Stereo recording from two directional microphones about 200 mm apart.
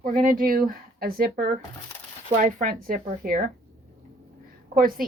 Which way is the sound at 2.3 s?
40° right (ahead or behind).